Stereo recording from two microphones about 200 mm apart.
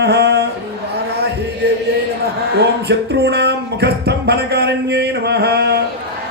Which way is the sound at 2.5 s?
55° right (ahead or behind).